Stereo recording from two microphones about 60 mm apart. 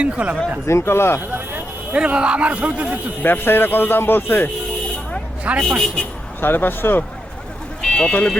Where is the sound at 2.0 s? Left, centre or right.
Centre.